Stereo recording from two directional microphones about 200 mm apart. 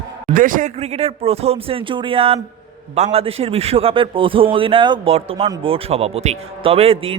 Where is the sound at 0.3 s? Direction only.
40° right (ahead or behind).